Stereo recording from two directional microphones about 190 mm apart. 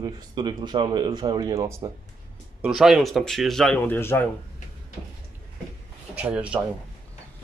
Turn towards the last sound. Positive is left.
turn(degrees=-5)  # may be behind; listen again after turning